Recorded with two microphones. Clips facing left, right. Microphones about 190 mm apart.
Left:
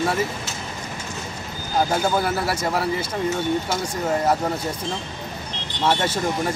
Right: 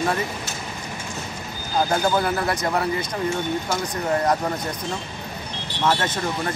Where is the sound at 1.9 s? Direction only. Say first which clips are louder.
Even; 5° left (ahead or behind).